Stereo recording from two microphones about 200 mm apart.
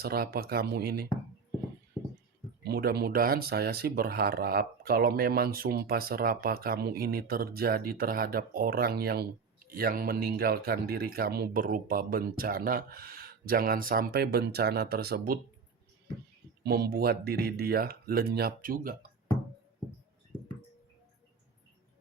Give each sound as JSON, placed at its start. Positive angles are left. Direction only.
{"t": 0.0, "sound": "speech", "side_deg": -50}
{"t": 2.6, "sound": "speech", "side_deg": -50}
{"t": 16.6, "sound": "speech", "side_deg": -50}